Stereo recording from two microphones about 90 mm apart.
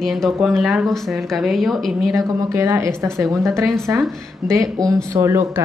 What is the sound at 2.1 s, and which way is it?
Speech, 35° right (ahead or behind).